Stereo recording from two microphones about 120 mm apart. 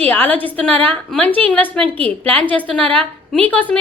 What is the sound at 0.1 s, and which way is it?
A woman's voice, 15° left (ahead or behind).